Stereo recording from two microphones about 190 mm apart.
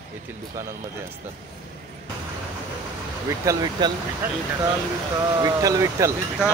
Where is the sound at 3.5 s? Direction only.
20° right (ahead or behind).